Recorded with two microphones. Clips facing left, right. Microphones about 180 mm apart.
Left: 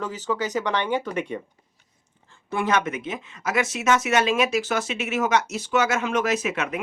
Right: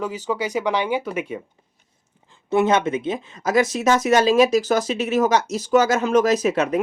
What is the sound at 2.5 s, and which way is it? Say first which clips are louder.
Speech: right 6 dB; 25° right (ahead or behind).